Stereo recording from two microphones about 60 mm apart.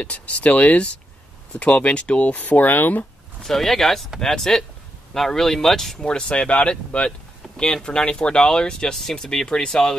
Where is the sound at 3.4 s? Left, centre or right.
Centre.